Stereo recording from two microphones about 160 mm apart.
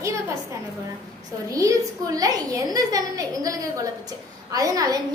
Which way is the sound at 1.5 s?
20° right (ahead or behind).